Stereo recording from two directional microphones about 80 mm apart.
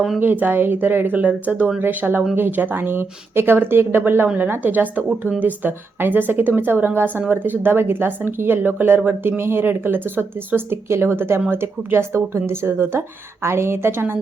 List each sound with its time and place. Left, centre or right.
0.2 s a woman's voice: right